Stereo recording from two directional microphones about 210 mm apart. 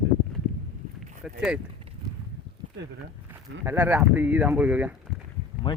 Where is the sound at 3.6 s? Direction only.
10° right (ahead or behind).